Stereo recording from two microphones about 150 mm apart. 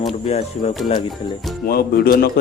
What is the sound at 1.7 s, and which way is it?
Speech, 90° left.